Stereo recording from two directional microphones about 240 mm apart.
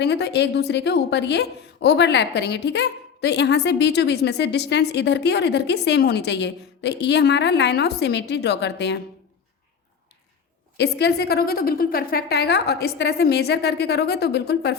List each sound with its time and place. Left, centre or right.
0.0 s a woman's voice: left
10.8 s a woman's voice: left